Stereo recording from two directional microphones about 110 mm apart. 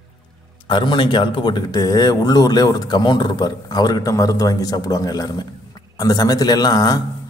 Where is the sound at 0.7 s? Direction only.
45° left (ahead or behind).